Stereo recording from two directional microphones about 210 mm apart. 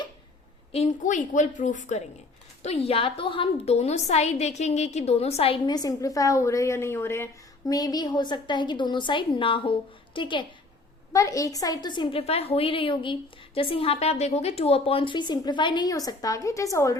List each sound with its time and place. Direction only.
0.7 s a woman's voice: 30° left (ahead or behind); by 17.0 s 15° left (ahead or behind)